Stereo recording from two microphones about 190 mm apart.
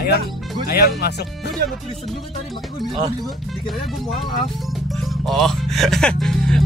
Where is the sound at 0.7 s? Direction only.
55° left (ahead or behind).